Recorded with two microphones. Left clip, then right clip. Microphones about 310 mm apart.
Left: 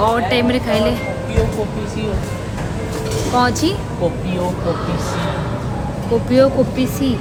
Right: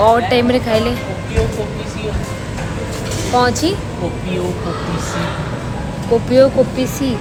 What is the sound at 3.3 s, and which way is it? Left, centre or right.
Speech, centre.